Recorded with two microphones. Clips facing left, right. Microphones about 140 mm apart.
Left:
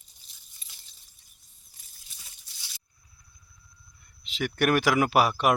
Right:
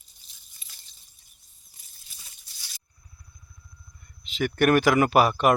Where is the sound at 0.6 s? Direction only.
5° right (ahead or behind).